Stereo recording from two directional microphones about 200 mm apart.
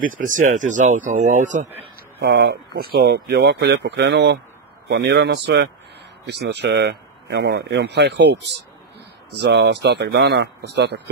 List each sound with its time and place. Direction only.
0.4 s speech: 40° right (ahead or behind)
2.1 s a man's voice: 60° right (ahead or behind)